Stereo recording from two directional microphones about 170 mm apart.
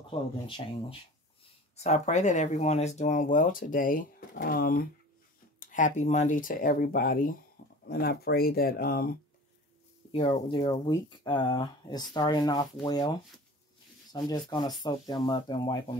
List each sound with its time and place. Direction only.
0.0 s speech: 30° left (ahead or behind)
1.8 s speech: 40° left (ahead or behind); by 4.8 s 60° left (ahead or behind)
5.6 s speech: 50° left (ahead or behind)
7.6 s a sound: 65° left (ahead or behind)
7.9 s speech: 65° left (ahead or behind)
10.1 s speech: 35° left (ahead or behind)
10.7 s speech: 25° left (ahead or behind)
14.1 s speech: 25° left (ahead or behind)